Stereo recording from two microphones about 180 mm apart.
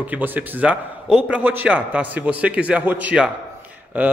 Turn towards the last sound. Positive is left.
turn(degrees=-10)  # may be behind; listen again after turning